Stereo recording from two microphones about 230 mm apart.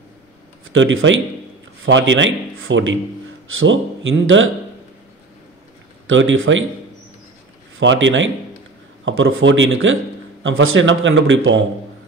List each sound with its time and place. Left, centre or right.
0.7 s a man's voice: right
6.0 s a man's voice: right
7.8 s a man's voice: right